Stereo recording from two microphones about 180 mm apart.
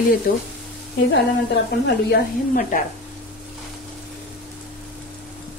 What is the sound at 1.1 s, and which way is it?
A woman's voice, 70° left (ahead or behind).